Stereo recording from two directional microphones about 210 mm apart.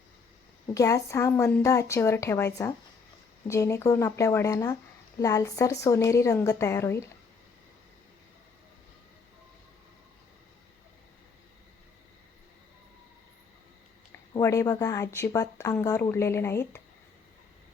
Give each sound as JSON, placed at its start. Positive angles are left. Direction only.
{"t": 0.7, "sound": "speech", "side_deg": 15}
{"t": 14.3, "sound": "speech", "side_deg": 15}